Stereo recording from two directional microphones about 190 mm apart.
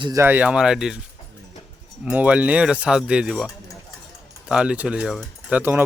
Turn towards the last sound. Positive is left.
turn(degrees=-10)  # may be behind; listen again after turning